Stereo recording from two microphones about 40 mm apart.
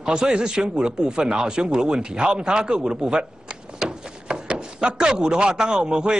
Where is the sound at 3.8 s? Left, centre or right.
Centre.